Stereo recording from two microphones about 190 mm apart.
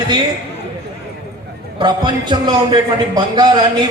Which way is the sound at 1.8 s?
25° right (ahead or behind).